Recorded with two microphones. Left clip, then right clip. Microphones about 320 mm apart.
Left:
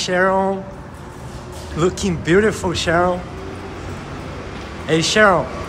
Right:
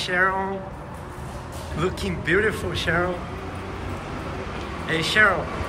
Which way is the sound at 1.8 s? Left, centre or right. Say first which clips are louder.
Left 7 dB; centre.